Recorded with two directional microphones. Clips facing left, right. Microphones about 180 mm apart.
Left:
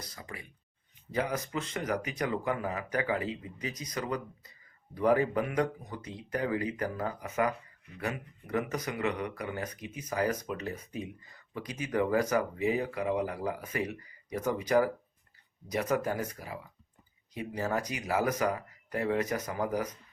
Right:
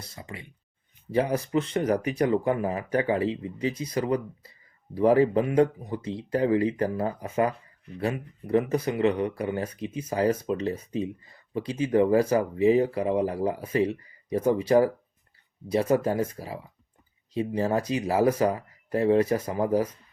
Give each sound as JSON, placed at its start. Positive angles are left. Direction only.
{"t": 0.0, "sound": "speech", "side_deg": -25}